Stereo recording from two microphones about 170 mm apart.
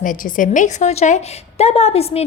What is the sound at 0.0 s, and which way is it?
A woman's voice, 50° left (ahead or behind).